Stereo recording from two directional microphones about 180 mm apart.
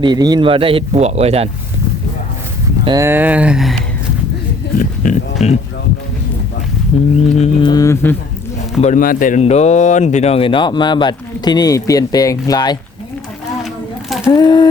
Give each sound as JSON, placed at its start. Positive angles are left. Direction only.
{"t": 0.0, "sound": "speech", "side_deg": -25}
{"t": 2.8, "sound": "speech", "side_deg": -20}
{"t": 4.8, "sound": "livestock", "side_deg": 40}
{"t": 6.9, "sound": "speech", "side_deg": 30}
{"t": 7.6, "sound": "speech", "side_deg": 20}
{"t": 8.8, "sound": "speech", "side_deg": 45}
{"t": 14.3, "sound": "speech", "side_deg": 25}